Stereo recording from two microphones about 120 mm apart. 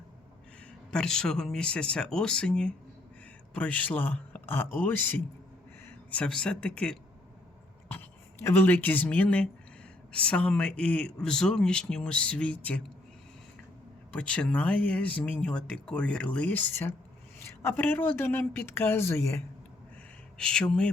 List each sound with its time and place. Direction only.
0.9 s speech: 5° left (ahead or behind)
8.4 s speech: 15° left (ahead or behind)
14.1 s a woman's voice: 10° left (ahead or behind)
20.4 s speech: 5° left (ahead or behind)